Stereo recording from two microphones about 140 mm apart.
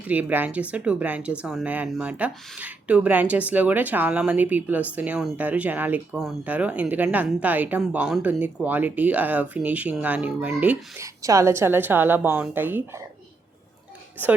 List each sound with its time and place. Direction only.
0.1 s speech: 10° right (ahead or behind)
11.0 s speech: 25° right (ahead or behind)